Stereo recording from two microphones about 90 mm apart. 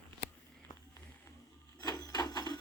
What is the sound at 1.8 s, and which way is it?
Wood, 40° left (ahead or behind).